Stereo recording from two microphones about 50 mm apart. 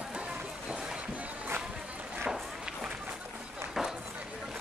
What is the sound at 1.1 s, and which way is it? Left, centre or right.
Music, right.